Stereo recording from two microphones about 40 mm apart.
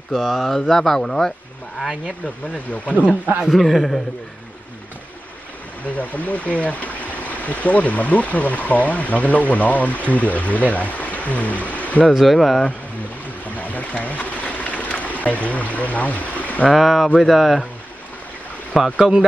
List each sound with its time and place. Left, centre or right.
0.2 s speech: centre
0.5 s speech: centre
2.2 s speech: left
3.5 s a man's voice: centre
5.9 s speech: left
12.3 s a man's voice: centre
13.6 s a sound: left
16.7 s a man's voice: centre
18.9 s speech: centre